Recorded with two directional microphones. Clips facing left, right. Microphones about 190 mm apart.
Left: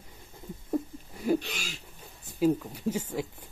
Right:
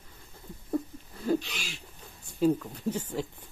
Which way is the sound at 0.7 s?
15° left (ahead or behind).